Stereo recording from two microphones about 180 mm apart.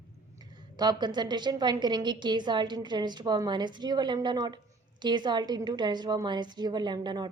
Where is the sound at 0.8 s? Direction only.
25° right (ahead or behind).